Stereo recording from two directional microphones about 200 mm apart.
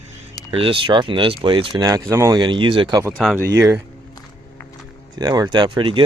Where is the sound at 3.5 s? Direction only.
15° right (ahead or behind).